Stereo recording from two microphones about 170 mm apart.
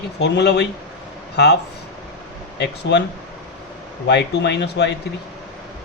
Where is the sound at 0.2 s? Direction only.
85° left.